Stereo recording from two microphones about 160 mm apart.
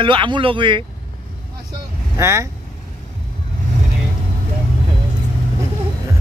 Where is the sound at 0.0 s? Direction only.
30° right (ahead or behind).